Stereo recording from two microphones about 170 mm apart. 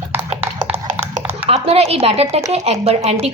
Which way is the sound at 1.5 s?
35° right (ahead or behind).